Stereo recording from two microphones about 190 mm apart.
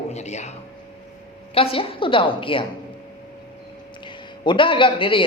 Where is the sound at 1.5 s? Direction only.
30° left (ahead or behind).